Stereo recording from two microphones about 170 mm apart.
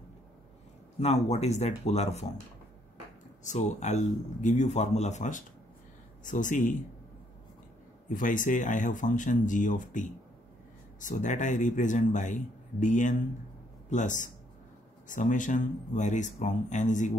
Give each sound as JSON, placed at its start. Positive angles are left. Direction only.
{"t": 0.9, "sound": "speech", "side_deg": 40}
{"t": 3.4, "sound": "speech", "side_deg": 40}
{"t": 8.1, "sound": "a man's voice", "side_deg": 50}